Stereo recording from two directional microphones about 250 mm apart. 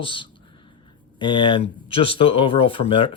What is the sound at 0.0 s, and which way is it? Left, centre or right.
Speech, centre.